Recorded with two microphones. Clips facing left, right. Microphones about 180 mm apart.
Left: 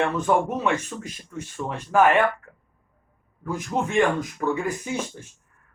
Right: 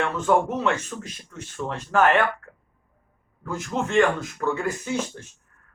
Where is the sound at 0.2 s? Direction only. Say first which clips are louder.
Right 1 dB; 15° left (ahead or behind).